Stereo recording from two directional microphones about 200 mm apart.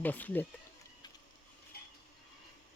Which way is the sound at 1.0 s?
20° left (ahead or behind).